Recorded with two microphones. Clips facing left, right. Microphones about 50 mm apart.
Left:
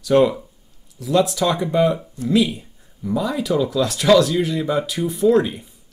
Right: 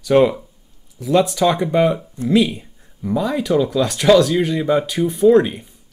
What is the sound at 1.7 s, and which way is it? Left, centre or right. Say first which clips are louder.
Speech: right 2 dB; centre.